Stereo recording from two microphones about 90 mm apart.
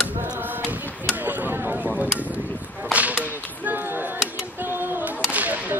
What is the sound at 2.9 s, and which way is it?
Whip, 15° right (ahead or behind).